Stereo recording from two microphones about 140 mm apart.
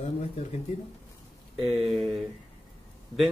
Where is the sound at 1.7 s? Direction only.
Centre (ahead or behind).